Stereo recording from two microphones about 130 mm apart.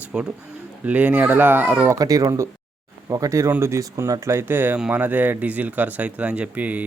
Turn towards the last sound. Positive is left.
turn(degrees=-10)  # may be behind; listen again after turning